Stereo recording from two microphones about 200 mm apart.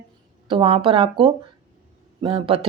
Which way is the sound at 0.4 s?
25° right (ahead or behind).